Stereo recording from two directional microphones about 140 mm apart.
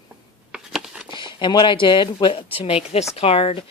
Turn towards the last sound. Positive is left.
turn(degrees=45)  # may be behind; listen again after turning